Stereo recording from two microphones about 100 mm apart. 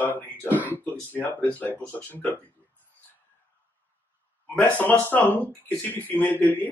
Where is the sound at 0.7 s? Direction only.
15° left (ahead or behind).